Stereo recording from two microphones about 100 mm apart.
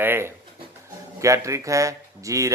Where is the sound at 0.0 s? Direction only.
25° right (ahead or behind).